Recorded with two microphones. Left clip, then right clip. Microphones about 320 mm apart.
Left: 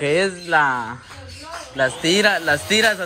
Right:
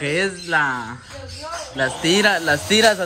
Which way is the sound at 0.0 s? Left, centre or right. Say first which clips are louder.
Left 2 dB; centre.